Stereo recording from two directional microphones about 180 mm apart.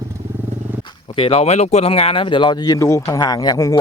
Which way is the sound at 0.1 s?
15° right (ahead or behind).